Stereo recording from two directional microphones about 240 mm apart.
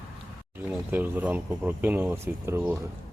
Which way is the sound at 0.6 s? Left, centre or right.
Centre.